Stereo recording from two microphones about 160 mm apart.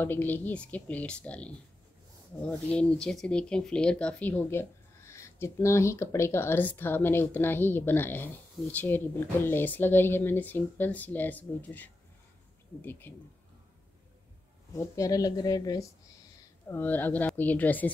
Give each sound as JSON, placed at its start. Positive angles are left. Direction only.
{"t": 0.0, "sound": "speech", "side_deg": 15}
{"t": 13.1, "sound": "speech", "side_deg": 15}
{"t": 14.8, "sound": "a woman's voice", "side_deg": 20}
{"t": 16.6, "sound": "speech", "side_deg": 10}